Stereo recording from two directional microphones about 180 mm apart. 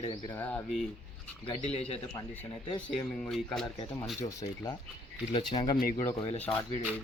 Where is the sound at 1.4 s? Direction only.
35° left (ahead or behind).